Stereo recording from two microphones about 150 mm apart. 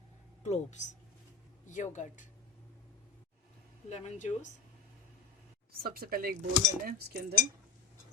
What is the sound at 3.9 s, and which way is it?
Speech, 50° left (ahead or behind).